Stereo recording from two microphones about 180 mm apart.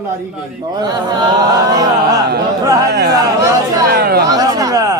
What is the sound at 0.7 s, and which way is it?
Speech, 20° right (ahead or behind).